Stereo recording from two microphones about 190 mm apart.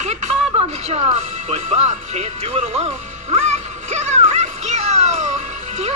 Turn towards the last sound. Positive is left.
turn(degrees=-35)  # may be behind; listen again after turning